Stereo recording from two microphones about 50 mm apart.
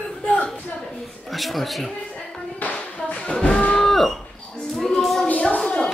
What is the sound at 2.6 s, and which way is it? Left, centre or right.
Music, left.